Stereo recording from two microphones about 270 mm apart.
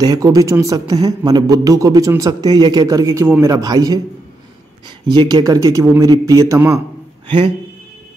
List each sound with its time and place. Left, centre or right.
0.0 s a man's voice: centre